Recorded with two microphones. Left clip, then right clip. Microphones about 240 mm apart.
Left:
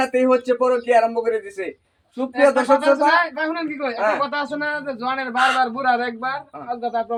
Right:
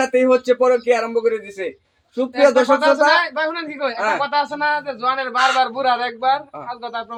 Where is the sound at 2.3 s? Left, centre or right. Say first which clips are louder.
Right 2 dB; right.